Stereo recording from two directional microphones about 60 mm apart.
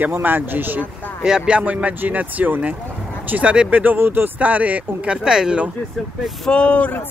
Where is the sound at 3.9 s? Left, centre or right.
Right.